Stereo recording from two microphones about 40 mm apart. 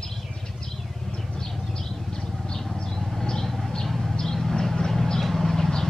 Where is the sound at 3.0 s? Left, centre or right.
Centre.